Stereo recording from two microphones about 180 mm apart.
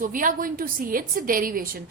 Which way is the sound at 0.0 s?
50° right (ahead or behind).